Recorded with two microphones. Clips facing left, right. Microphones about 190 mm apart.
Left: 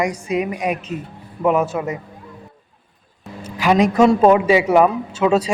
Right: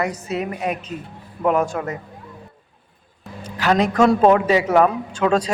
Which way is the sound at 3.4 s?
10° left (ahead or behind).